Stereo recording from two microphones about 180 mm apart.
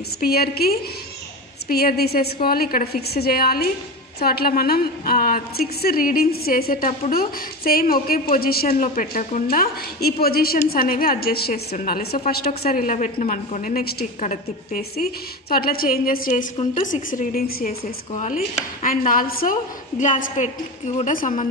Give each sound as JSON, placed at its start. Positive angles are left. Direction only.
{"t": 0.2, "sound": "a woman's voice", "side_deg": 60}
{"t": 14.2, "sound": "a woman's voice", "side_deg": 40}
{"t": 15.5, "sound": "a woman's voice", "side_deg": 55}
{"t": 18.1, "sound": "a woman's voice", "side_deg": 40}